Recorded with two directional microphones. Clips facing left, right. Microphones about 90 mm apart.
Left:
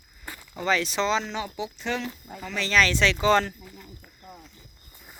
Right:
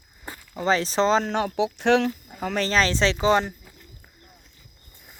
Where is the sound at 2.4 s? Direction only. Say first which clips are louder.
Right 6 dB; 50° right (ahead or behind).